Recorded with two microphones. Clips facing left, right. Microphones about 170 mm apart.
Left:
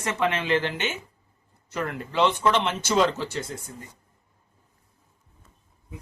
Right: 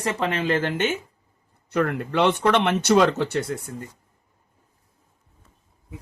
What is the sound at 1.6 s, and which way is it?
Speech, 60° right (ahead or behind).